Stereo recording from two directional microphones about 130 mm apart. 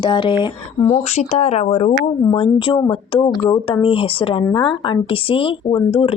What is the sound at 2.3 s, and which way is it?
Speech, 40° left (ahead or behind).